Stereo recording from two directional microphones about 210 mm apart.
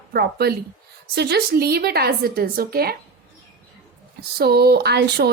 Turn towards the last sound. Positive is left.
turn(degrees=-50)  # may be behind; listen again after turning